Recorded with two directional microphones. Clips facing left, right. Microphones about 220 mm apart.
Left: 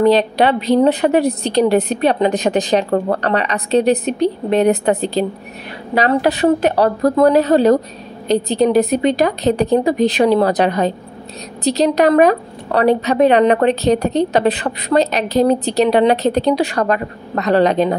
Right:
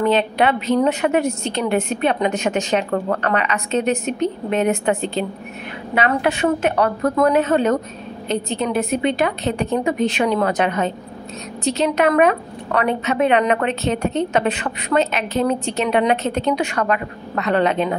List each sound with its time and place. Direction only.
0.0 s a woman's voice: 35° left (ahead or behind)